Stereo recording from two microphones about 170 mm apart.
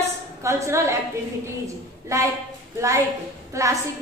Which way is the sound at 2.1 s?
20° right (ahead or behind).